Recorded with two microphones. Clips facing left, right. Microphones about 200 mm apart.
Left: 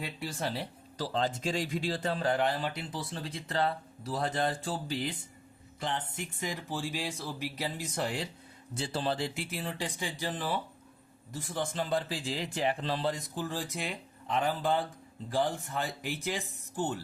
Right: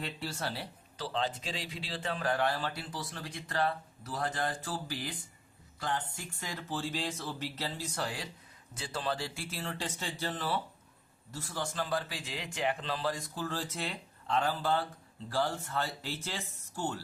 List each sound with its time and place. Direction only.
0.0 s speech: 15° left (ahead or behind)
0.9 s speech: 40° left (ahead or behind)
2.2 s speech: 20° left (ahead or behind)